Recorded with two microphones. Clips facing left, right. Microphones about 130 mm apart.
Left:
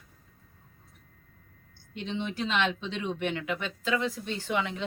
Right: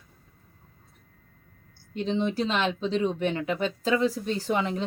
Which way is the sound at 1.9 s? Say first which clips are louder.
Right 7 dB; 35° right (ahead or behind).